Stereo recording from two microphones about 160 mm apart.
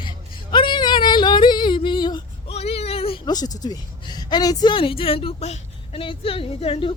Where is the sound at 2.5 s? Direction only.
40° left (ahead or behind).